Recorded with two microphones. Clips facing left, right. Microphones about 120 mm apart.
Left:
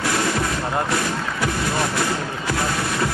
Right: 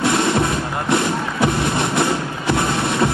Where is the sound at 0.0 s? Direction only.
25° right (ahead or behind).